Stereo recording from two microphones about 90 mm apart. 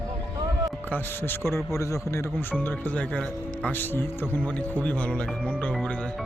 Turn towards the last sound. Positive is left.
turn(degrees=15)  # may be behind; listen again after turning